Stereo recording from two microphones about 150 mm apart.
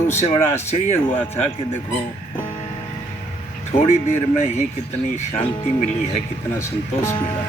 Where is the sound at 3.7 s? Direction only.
50° left (ahead or behind).